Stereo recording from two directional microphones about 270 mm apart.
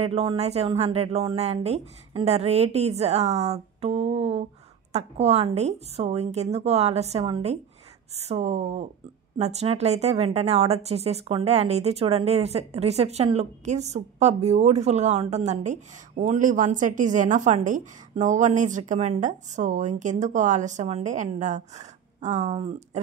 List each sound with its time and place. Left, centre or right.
0.0 s speech: right